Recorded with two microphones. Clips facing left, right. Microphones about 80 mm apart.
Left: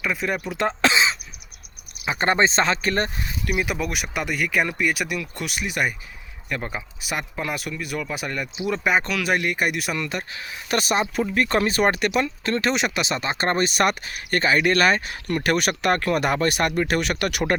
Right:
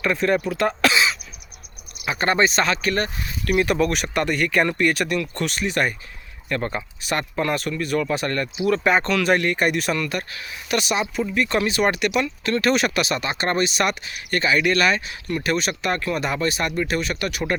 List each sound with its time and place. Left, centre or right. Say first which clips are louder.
0.0 s speech: right 5 dB; centre
0.4 s speech: right 1 dB; left
3.4 s speech: right 6 dB; centre
8.5 s speech: right 5 dB; centre
8.8 s speech: right 3 dB; centre
10.0 s speech: right 2 dB; left
10.7 s speech: left 1 dB; left